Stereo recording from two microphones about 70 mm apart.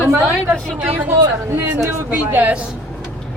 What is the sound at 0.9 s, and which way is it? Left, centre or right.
A woman's voice, right.